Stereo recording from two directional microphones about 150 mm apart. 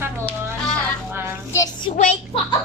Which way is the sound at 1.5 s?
20° left (ahead or behind).